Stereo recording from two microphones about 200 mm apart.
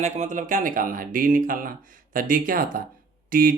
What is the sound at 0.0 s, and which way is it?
Speech, 35° right (ahead or behind).